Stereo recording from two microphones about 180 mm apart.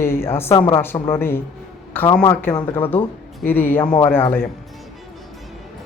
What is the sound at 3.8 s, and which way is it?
Speech, 20° left (ahead or behind).